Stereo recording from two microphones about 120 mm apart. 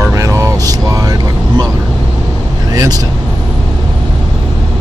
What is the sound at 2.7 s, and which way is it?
Speech, 30° right (ahead or behind).